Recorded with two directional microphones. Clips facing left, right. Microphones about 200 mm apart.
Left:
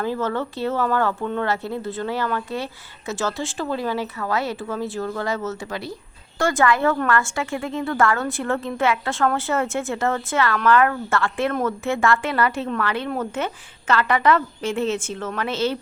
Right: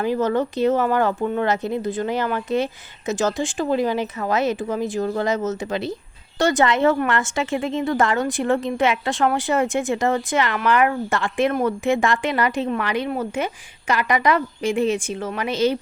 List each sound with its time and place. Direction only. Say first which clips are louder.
0.0 s a woman's voice: right 4 dB; 15° right (ahead or behind)